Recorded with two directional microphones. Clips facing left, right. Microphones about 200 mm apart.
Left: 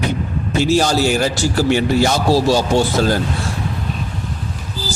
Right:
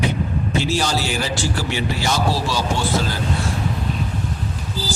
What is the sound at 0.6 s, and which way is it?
A man's voice, 45° left (ahead or behind).